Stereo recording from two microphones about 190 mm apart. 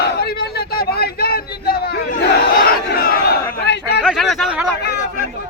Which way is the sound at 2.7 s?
50° left (ahead or behind).